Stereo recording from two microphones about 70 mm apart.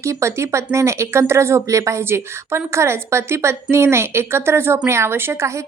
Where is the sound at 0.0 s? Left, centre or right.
Right.